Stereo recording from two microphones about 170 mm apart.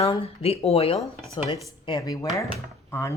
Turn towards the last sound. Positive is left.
turn(degrees=15)  # may be behind; listen again after turning